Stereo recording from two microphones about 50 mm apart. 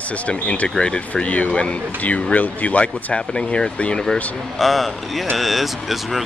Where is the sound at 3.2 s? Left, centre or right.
Centre.